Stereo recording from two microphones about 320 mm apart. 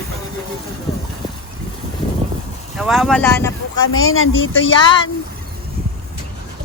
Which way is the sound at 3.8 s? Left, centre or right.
Left.